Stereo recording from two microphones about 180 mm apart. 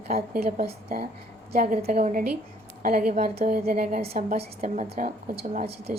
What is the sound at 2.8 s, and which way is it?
A woman's voice, 55° right (ahead or behind).